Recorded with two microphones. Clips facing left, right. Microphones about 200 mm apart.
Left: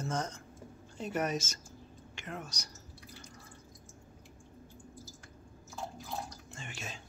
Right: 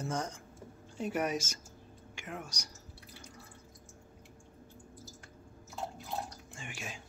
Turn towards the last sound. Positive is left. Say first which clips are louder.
# even
turn(degrees=-10)  # may be behind; listen again after turning